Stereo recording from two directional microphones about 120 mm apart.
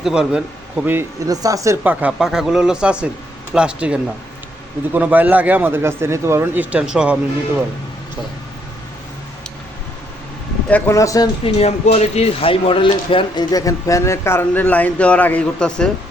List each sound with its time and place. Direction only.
0.0 s speech: 5° right (ahead or behind)
0.9 s speech: 30° right (ahead or behind)
1.8 s a man's voice: 15° right (ahead or behind)
4.9 s speech: 15° right (ahead or behind)
10.7 s speech: 15° left (ahead or behind)
10.9 s speech: 30° left (ahead or behind)
11.4 s speech: 60° left (ahead or behind); by 15.9 s 5° left (ahead or behind)